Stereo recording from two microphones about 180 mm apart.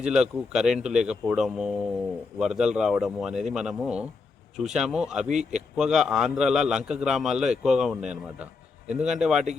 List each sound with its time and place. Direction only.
0.0 s speech: 5° right (ahead or behind)
5.3 s speech: 40° right (ahead or behind)
5.7 s speech: 5° right (ahead or behind)